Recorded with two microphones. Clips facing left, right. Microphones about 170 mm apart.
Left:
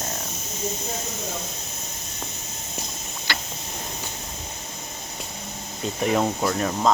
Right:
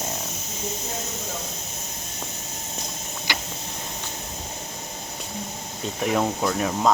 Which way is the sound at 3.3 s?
15° right (ahead or behind).